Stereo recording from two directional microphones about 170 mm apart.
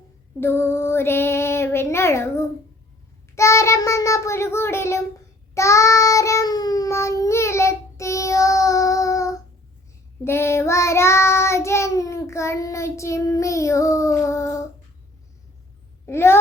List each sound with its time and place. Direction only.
0.3 s female singing: 15° left (ahead or behind)
5.5 s child singing: 15° left (ahead or behind)
16.0 s female singing: 15° left (ahead or behind)